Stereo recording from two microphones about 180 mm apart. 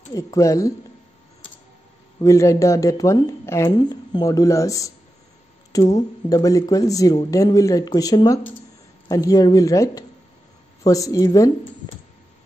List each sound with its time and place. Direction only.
0.1 s speech: 15° left (ahead or behind)
2.1 s speech: 15° left (ahead or behind)